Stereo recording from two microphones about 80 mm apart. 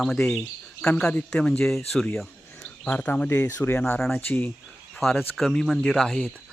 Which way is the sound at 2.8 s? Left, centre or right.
Centre.